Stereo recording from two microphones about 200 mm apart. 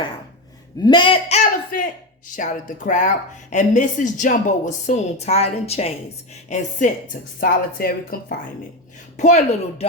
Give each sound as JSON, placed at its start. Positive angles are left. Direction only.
{"t": 0.8, "sound": "speech", "side_deg": 20}
{"t": 2.3, "sound": "a woman's voice", "side_deg": 40}